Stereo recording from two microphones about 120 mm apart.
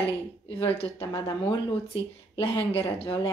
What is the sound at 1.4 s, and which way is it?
Speech, 50° left (ahead or behind).